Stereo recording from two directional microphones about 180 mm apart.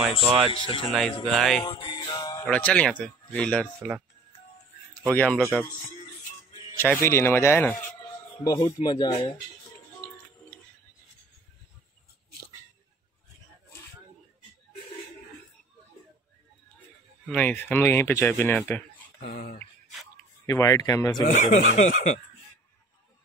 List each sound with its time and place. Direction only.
0.5 s speech: 30° left (ahead or behind)
1.2 s speech: centre (ahead or behind)
1.6 s music: 30° left (ahead or behind)
2.4 s speech: 5° left (ahead or behind)
5.0 s speech: 5° left (ahead or behind)
6.8 s speech: 15° left (ahead or behind)
8.0 s music: 20° left (ahead or behind)
8.5 s speech: 30° left (ahead or behind)
17.3 s speech: 10° left (ahead or behind)
19.1 s speech: 55° left (ahead or behind)
20.4 s speech: 20° left (ahead or behind)
21.3 s speech: 45° left (ahead or behind)